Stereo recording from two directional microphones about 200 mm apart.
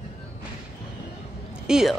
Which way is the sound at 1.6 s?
5° right (ahead or behind).